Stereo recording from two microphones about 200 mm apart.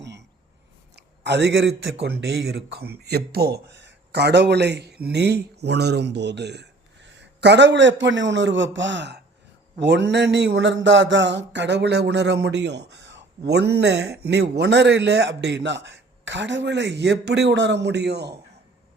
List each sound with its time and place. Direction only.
0.9 s a man's voice: 55° right (ahead or behind)